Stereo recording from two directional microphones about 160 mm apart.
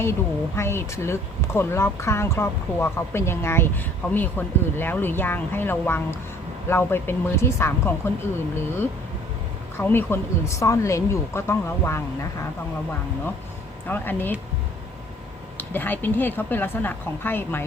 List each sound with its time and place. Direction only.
0.0 s speech: 15° left (ahead or behind)
9.7 s speech: 15° left (ahead or behind)
13.8 s speech: 10° left (ahead or behind)
15.5 s speech: 10° left (ahead or behind)